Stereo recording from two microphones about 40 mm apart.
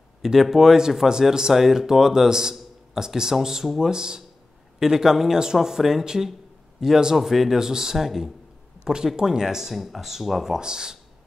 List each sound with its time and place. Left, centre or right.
0.2 s speech: centre
2.5 s a sound: centre
3.3 s speech: centre